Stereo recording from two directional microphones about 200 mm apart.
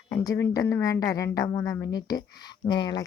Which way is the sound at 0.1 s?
15° left (ahead or behind).